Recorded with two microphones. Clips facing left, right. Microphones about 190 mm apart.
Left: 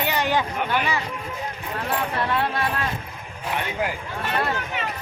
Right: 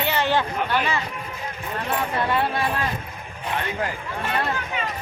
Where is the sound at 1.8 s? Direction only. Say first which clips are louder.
Right 1 dB; centre (ahead or behind).